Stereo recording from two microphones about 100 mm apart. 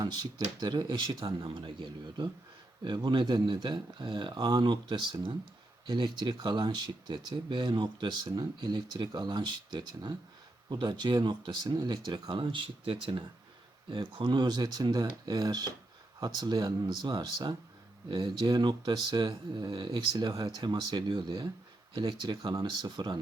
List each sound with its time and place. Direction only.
0.0 s speech: 45° right (ahead or behind); by 13.2 s 60° right (ahead or behind)
14.2 s speech: 45° right (ahead or behind)